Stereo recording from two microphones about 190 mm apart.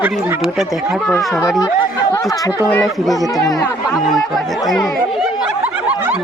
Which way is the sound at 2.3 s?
20° left (ahead or behind).